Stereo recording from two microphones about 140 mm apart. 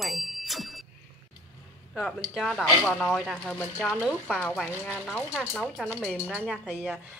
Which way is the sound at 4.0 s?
5° right (ahead or behind).